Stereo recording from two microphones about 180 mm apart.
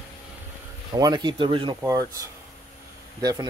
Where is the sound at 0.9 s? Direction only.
20° right (ahead or behind).